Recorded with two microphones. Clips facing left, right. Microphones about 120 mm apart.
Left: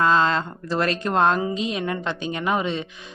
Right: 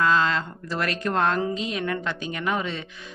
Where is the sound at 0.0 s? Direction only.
30° left (ahead or behind).